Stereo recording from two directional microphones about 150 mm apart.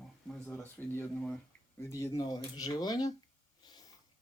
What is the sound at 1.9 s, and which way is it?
Speech, 20° left (ahead or behind).